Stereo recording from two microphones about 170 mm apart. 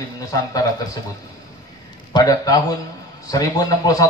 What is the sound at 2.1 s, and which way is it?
Speech, 20° left (ahead or behind).